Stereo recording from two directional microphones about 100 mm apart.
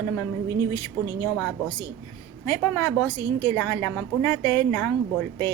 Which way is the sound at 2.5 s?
25° left (ahead or behind).